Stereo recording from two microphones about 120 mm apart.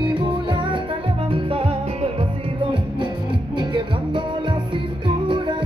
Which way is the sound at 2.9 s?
40° right (ahead or behind).